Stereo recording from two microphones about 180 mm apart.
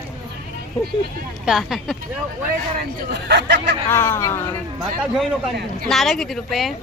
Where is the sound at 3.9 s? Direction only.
15° left (ahead or behind).